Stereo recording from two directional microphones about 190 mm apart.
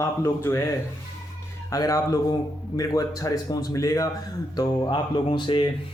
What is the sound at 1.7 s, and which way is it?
Speech, 15° left (ahead or behind).